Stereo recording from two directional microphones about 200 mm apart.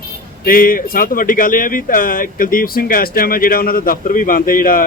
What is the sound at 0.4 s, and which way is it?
Speech, 45° left (ahead or behind).